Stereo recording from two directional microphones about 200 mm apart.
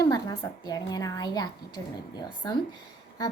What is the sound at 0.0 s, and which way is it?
A woman's voice, 20° left (ahead or behind).